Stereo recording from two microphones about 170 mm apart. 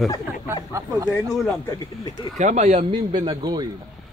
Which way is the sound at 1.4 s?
20° left (ahead or behind).